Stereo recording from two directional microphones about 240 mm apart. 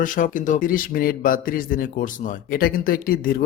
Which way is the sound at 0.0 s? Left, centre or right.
Left.